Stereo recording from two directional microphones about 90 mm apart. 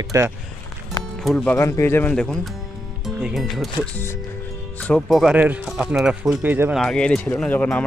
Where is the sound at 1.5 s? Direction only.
30° left (ahead or behind).